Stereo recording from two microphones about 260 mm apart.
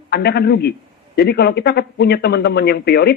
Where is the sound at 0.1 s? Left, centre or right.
Left.